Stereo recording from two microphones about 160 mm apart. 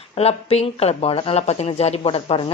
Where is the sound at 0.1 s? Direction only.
40° left (ahead or behind).